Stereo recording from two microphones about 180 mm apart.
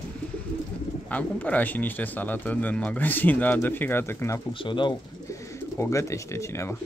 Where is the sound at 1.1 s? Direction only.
10° left (ahead or behind).